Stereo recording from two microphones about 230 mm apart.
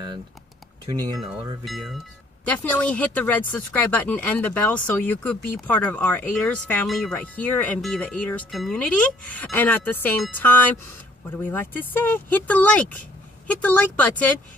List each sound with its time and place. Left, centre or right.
0.8 s speech: centre
1.6 s speech: centre